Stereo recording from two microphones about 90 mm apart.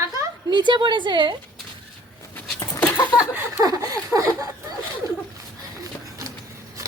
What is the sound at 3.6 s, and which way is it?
Speech, 40° right (ahead or behind).